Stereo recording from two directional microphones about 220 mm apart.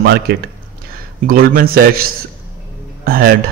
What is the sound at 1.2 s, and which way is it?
A man's voice, 40° right (ahead or behind).